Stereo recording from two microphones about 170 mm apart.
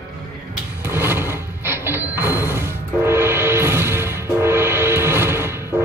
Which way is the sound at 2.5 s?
15° right (ahead or behind).